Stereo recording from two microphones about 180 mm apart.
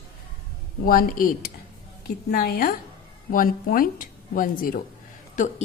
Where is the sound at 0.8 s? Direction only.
50° left (ahead or behind).